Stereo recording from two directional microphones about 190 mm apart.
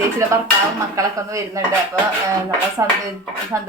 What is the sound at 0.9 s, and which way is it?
Speech, 15° right (ahead or behind).